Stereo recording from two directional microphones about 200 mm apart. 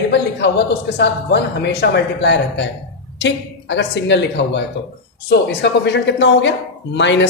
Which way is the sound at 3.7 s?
60° left (ahead or behind).